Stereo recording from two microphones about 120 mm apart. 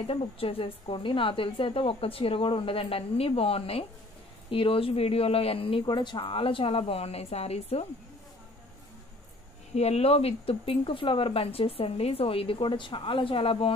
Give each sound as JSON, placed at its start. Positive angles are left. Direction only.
{"t": 0.0, "sound": "speech", "side_deg": 50}
{"t": 9.8, "sound": "speech", "side_deg": 60}